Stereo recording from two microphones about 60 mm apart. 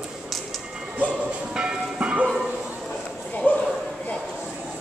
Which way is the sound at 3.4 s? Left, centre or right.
Left.